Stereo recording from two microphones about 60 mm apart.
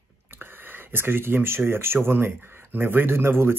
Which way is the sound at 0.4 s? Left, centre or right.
Right.